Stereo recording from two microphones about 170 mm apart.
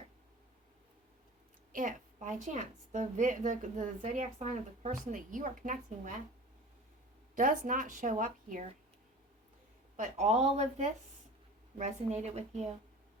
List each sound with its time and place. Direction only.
1.7 s a woman's voice: 50° right (ahead or behind)
7.3 s a woman's voice: 50° right (ahead or behind)
10.0 s a woman's voice: 40° right (ahead or behind)